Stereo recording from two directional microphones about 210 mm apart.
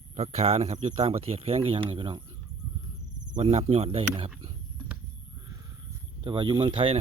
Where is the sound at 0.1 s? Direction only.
30° right (ahead or behind).